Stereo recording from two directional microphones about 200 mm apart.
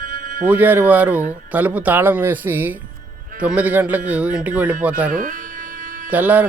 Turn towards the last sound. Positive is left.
turn(degrees=-10)  # may be behind; listen again after turning